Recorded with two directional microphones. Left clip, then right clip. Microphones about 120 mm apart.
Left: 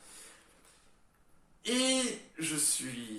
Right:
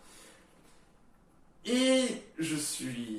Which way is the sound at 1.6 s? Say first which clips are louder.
Right 3 dB; 70° left (ahead or behind).